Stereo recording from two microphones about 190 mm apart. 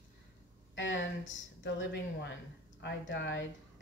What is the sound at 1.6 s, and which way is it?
Speech, 65° left (ahead or behind).